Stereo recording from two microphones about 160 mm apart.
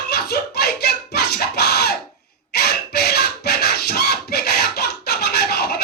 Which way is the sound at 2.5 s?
85° left.